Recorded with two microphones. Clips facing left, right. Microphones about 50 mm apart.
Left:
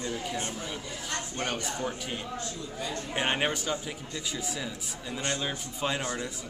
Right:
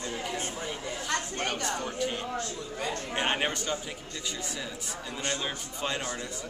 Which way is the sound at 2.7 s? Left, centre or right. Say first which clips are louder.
Right 2 dB; right.